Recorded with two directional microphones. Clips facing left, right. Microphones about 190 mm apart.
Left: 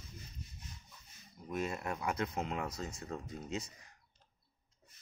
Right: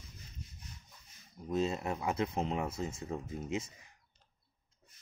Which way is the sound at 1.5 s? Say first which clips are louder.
Right 5 dB; 25° right (ahead or behind).